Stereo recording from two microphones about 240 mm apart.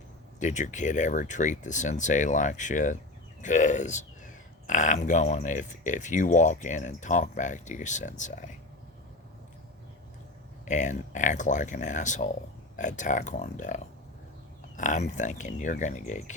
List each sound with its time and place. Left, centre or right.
0.3 s speech: left
10.7 s speech: left